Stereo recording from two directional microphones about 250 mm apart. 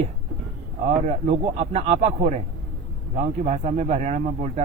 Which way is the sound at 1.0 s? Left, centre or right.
Right.